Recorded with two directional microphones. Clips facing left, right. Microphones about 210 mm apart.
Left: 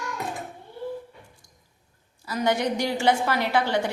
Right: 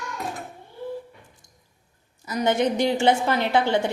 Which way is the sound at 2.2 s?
20° right (ahead or behind).